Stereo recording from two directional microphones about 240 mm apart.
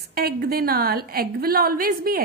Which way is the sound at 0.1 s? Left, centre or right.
Right.